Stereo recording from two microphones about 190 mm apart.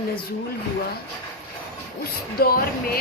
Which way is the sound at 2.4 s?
50° left (ahead or behind).